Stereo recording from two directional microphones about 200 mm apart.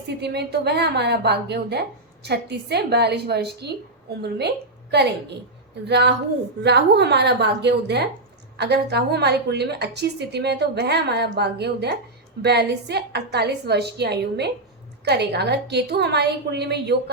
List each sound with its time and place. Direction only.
0.1 s a woman's voice: 55° right (ahead or behind)